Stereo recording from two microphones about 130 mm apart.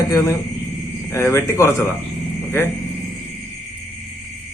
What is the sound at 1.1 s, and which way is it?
Speech, 20° left (ahead or behind).